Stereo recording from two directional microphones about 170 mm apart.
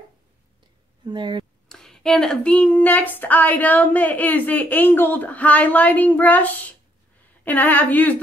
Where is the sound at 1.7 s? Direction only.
5° left (ahead or behind).